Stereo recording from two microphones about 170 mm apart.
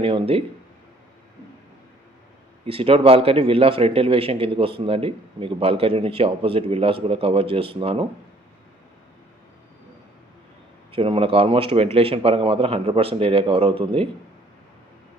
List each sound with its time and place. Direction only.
0.0 s a man's voice: 30° right (ahead or behind)
2.6 s a man's voice: 35° right (ahead or behind)
10.9 s a man's voice: 30° right (ahead or behind)